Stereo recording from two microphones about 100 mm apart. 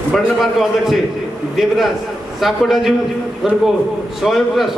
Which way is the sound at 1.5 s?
Centre (ahead or behind).